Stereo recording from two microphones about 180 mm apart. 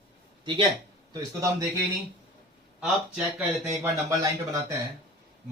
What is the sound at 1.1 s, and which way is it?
Speech, 20° right (ahead or behind).